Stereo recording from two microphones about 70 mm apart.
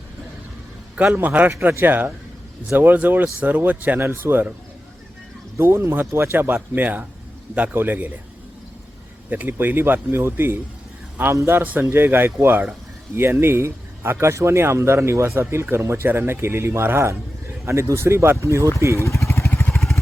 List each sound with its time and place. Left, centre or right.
0.9 s speech: right
5.5 s speech: right
9.3 s speech: right
18.9 s vehicle: left
19.7 s vehicle: centre